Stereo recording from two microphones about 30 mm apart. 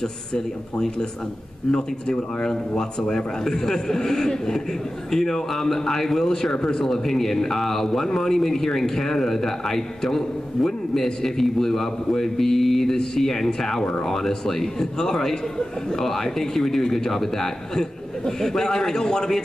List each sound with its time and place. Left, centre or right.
0.3 s a man's voice: left
6.6 s a man's voice: left
6.9 s a man's voice: centre